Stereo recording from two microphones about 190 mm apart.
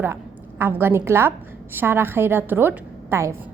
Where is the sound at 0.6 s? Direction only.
10° right (ahead or behind).